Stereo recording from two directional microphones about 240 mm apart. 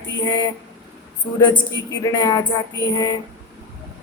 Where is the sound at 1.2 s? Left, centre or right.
Centre.